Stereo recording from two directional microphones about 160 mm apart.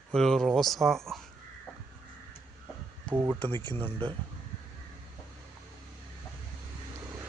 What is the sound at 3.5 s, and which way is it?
Speech, 15° left (ahead or behind).